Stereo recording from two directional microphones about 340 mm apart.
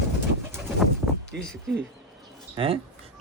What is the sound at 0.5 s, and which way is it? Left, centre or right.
Pigeon, centre.